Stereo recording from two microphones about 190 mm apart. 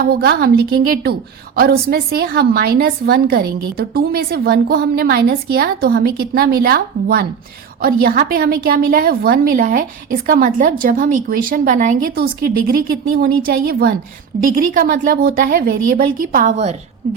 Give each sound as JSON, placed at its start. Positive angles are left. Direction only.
{"t": 0.0, "sound": "a woman's voice", "side_deg": -55}